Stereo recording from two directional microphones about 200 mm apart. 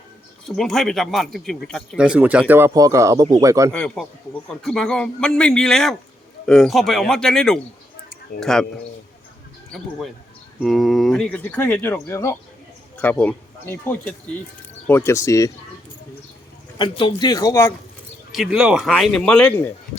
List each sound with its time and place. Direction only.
0.4 s speech: centre (ahead or behind); by 3.7 s 15° right (ahead or behind)
3.7 s speech: 5° left (ahead or behind)
10.6 s speech: centre (ahead or behind)
16.7 s a man's voice: 25° left (ahead or behind)
18.3 s speech: centre (ahead or behind)